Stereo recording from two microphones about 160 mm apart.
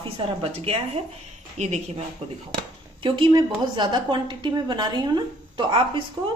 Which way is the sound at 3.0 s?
30° right (ahead or behind).